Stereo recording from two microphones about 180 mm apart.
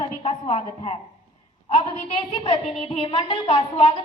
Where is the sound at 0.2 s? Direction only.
35° left (ahead or behind).